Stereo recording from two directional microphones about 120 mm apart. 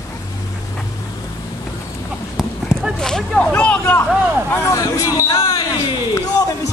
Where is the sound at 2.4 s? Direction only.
Centre (ahead or behind).